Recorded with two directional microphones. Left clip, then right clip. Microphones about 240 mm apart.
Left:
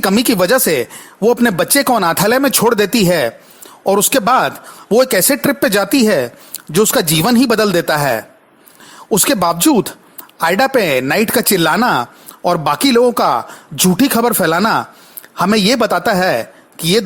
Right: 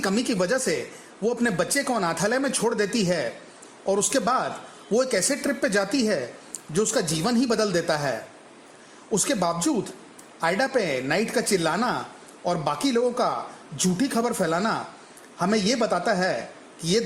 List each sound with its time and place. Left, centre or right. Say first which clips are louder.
0.0 s speech: left 11 dB; left